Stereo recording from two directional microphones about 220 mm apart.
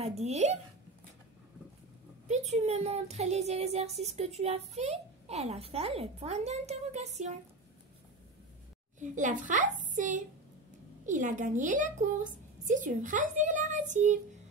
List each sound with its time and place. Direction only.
0.0 s speech: 30° right (ahead or behind)
2.2 s speech: 30° right (ahead or behind)
9.0 s a woman's voice: 35° right (ahead or behind)